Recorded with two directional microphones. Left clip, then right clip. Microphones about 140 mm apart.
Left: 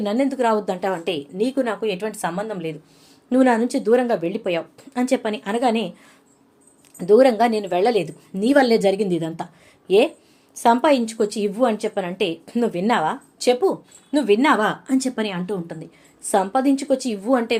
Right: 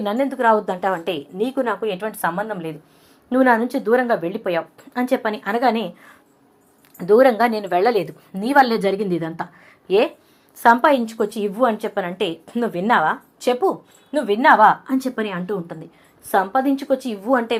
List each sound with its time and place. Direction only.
0.0 s a woman's voice: 20° left (ahead or behind)
6.9 s a woman's voice: 20° left (ahead or behind)
14.1 s a woman's voice: 25° left (ahead or behind)
17.2 s a woman's voice: 15° left (ahead or behind)